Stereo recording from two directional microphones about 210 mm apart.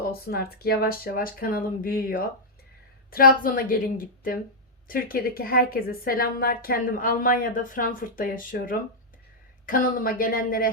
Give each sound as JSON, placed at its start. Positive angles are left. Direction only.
{"t": 0.0, "sound": "a woman's voice", "side_deg": 45}